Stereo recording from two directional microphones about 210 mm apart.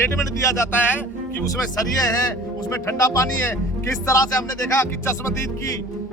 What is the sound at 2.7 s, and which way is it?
A man's voice, 15° left (ahead or behind).